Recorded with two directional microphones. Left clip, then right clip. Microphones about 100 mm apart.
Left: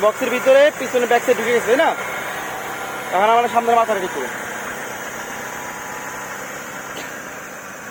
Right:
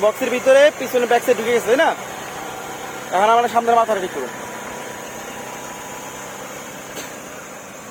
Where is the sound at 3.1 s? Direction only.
30° right (ahead or behind).